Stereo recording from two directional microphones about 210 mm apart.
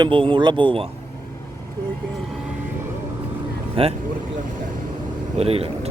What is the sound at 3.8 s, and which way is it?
Speech, 25° right (ahead or behind).